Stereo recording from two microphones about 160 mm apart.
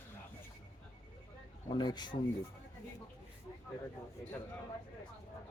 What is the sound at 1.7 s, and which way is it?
Speech, 25° left (ahead or behind).